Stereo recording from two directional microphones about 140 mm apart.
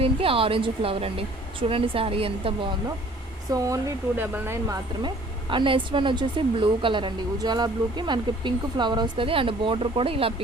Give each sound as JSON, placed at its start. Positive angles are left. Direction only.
{"t": 0.0, "sound": "speech", "side_deg": -40}
{"t": 3.5, "sound": "speech", "side_deg": -25}
{"t": 4.7, "sound": "speech", "side_deg": -35}